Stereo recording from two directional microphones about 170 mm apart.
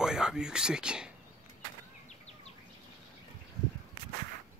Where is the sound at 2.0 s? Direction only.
40° left (ahead or behind).